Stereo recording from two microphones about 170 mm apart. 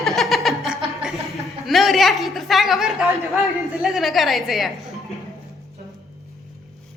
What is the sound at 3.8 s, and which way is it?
Speech, centre (ahead or behind).